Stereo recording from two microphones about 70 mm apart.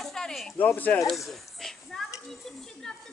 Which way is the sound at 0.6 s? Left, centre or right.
Left.